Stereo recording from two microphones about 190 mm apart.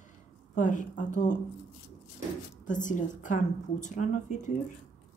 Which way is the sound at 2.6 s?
40° left (ahead or behind).